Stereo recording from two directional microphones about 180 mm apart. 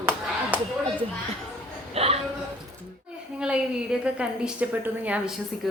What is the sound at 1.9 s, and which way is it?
Speech, 35° right (ahead or behind).